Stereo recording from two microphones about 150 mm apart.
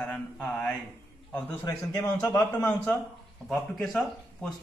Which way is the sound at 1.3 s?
15° left (ahead or behind).